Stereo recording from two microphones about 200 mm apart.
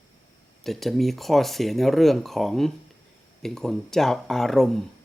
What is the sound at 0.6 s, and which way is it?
Speech, centre (ahead or behind).